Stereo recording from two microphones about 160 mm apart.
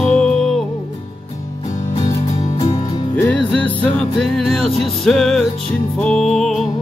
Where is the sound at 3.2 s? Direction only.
10° left (ahead or behind).